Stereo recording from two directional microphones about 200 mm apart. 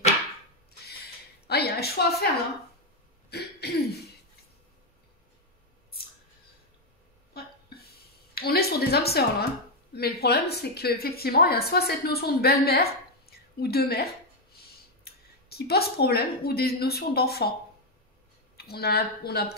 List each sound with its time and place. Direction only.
1.5 s a sound: 55° left (ahead or behind)
3.3 s cough: 55° left (ahead or behind)
8.4 s a sound: 50° left (ahead or behind)
9.9 s a woman's voice: 50° left (ahead or behind)
15.0 s speech: 50° left (ahead or behind)
18.6 s a woman's voice: 50° left (ahead or behind)